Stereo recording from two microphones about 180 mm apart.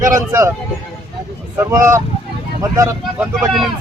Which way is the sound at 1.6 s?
15° right (ahead or behind).